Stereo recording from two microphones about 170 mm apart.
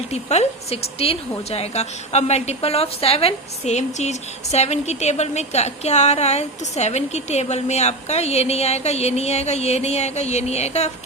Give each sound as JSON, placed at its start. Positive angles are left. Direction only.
{"t": 0.1, "sound": "a woman's voice", "side_deg": 40}